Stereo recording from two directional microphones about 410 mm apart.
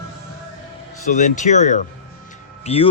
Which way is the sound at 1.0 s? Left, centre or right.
Centre.